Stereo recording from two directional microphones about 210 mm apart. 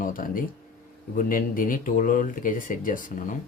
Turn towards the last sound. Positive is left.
turn(degrees=40)  # may be behind; listen again after turning